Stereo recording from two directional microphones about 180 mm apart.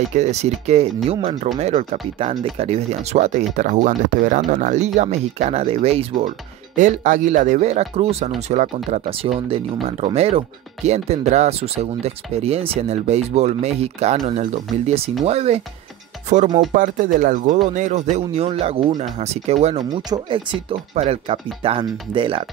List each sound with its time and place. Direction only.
0.1 s speech: 40° right (ahead or behind)
6.8 s speech: 45° right (ahead or behind)
16.7 s speech: 45° right (ahead or behind); by 22.4 s 30° right (ahead or behind)